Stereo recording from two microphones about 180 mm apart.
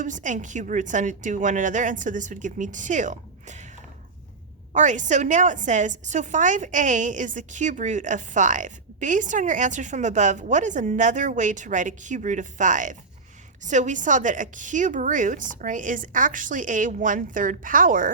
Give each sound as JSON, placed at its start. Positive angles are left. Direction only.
{"t": 0.0, "sound": "a woman's voice", "side_deg": -45}
{"t": 4.7, "sound": "a woman's voice", "side_deg": -40}